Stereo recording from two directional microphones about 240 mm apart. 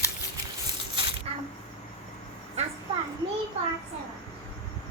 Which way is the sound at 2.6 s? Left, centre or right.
Right.